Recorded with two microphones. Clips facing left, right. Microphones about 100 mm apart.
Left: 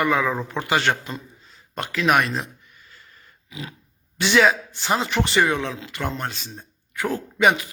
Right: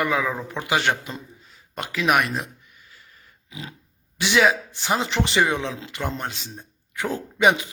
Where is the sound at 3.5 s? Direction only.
25° right (ahead or behind).